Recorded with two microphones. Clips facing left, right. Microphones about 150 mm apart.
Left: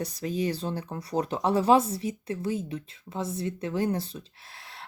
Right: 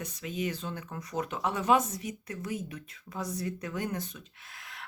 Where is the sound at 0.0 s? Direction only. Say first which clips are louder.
Left 5 dB; 35° left (ahead or behind).